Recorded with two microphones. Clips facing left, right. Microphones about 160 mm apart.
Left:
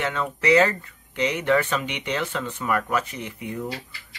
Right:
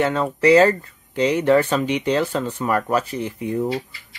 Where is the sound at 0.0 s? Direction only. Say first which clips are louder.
Right 7 dB; 35° right (ahead or behind).